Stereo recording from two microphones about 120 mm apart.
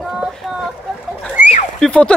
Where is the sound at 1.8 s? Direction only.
10° left (ahead or behind).